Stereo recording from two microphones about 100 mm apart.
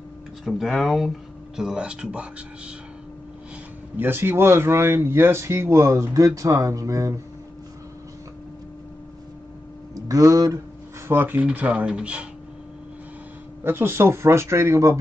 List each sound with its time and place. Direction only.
0.5 s speech: centre (ahead or behind)
3.9 s speech: 20° right (ahead or behind)
9.9 s speech: 35° right (ahead or behind)
11.1 s speech: 20° right (ahead or behind)
13.7 s speech: 25° right (ahead or behind)